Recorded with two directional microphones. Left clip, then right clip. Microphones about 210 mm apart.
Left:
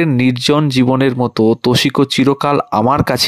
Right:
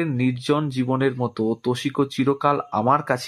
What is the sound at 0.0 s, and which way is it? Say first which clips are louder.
Speech: left 10 dB; 40° left (ahead or behind).